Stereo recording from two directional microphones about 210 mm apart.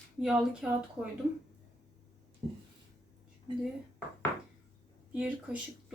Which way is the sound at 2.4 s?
30° right (ahead or behind).